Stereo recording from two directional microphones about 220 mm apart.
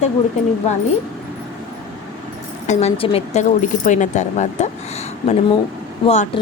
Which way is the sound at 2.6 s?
25° left (ahead or behind).